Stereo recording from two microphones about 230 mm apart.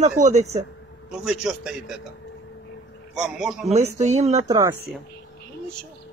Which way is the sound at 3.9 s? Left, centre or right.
Right.